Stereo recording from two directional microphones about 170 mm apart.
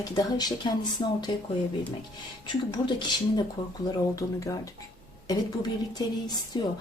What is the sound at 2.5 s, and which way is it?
Speech, 25° left (ahead or behind).